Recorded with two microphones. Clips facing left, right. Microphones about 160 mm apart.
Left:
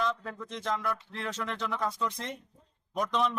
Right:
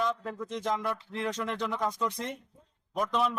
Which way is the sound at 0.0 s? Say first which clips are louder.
Right 1 dB; 10° right (ahead or behind).